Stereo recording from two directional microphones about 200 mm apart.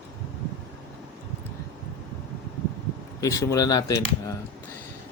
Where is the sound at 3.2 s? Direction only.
15° left (ahead or behind).